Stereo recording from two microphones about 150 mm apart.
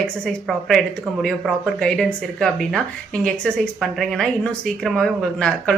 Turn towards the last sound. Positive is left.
turn(degrees=5)  # may be behind; listen again after turning